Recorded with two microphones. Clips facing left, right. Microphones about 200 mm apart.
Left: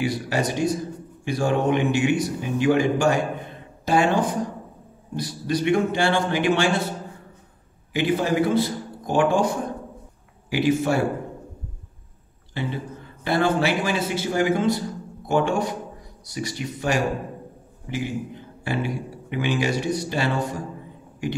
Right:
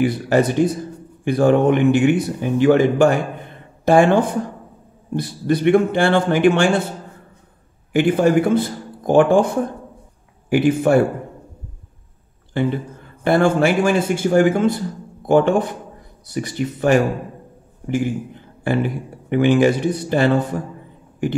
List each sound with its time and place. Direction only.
0.0 s a man's voice: 55° right (ahead or behind)
7.9 s a man's voice: 50° right (ahead or behind)
10.5 s a man's voice: 50° right (ahead or behind)
12.5 s a man's voice: 50° right (ahead or behind)
18.6 s a man's voice: 55° right (ahead or behind)